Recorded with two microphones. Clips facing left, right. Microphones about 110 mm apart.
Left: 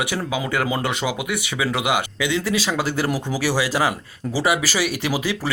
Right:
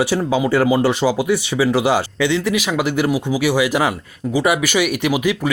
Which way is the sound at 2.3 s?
20° right (ahead or behind).